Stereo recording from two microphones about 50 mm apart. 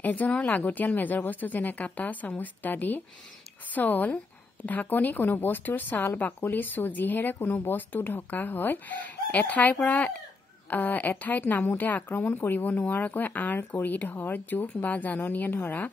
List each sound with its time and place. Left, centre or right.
0.0 s speech: left